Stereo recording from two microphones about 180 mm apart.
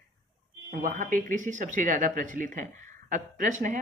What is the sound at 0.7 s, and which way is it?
Speech, 45° right (ahead or behind).